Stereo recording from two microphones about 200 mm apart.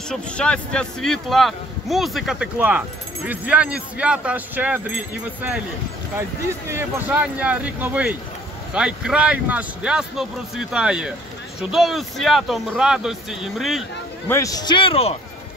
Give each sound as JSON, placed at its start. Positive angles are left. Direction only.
{"t": 0.1, "sound": "speech", "side_deg": 5}
{"t": 6.7, "sound": "speech", "side_deg": -10}
{"t": 14.3, "sound": "a man's voice", "side_deg": 15}